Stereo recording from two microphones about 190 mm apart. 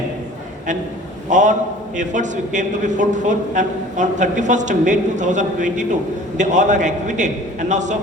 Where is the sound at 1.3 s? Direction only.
40° right (ahead or behind).